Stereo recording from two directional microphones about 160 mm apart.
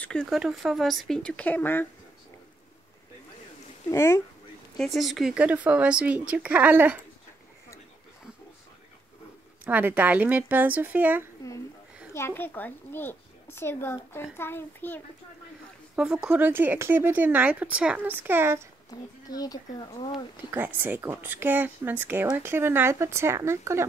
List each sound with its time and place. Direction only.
0.0 s speech: 5° left (ahead or behind)
3.9 s speech: 15° left (ahead or behind)
4.7 s speech: centre (ahead or behind)
9.7 s speech: 10° right (ahead or behind)
12.1 s speech: 15° left (ahead or behind)
16.0 s speech: 5° right (ahead or behind)
18.9 s speech: 25° left (ahead or behind)
20.5 s speech: 10° right (ahead or behind)